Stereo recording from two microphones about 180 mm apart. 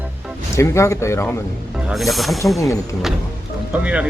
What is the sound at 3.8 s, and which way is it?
Speech, 5° right (ahead or behind).